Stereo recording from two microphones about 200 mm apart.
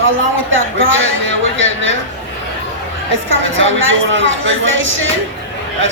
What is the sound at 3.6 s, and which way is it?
Speech, 75° right (ahead or behind).